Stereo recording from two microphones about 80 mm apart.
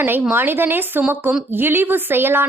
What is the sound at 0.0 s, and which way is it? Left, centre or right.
A woman's voice, right.